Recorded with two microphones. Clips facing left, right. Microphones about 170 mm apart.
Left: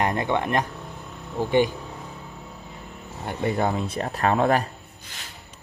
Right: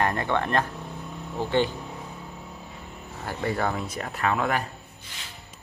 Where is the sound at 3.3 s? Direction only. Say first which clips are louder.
Left 3 dB; 20° left (ahead or behind).